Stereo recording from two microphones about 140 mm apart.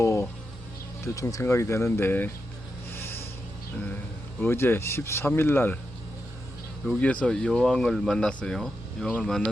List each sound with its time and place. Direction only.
0.0 s insect: 20° left (ahead or behind)
1.0 s speech: 25° left (ahead or behind)
2.9 s a sound: 15° left (ahead or behind)
4.4 s speech: 15° left (ahead or behind)
7.0 s speech: 10° left (ahead or behind)